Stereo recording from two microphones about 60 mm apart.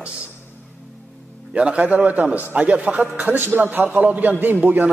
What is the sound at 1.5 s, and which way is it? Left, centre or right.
A man's voice, centre.